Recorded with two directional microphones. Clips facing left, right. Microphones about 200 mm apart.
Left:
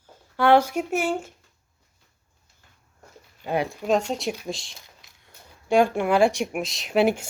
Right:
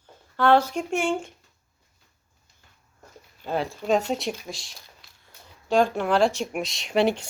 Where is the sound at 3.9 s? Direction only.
Centre (ahead or behind).